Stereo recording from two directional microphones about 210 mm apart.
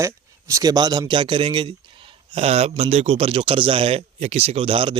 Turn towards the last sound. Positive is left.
turn(degrees=-25)  # may be behind; listen again after turning